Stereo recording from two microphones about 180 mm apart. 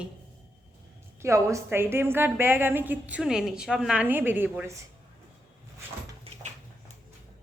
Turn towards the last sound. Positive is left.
turn(degrees=-35)  # may be behind; listen again after turning